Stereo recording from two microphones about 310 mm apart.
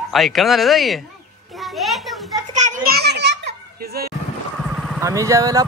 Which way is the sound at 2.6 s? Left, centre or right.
Right.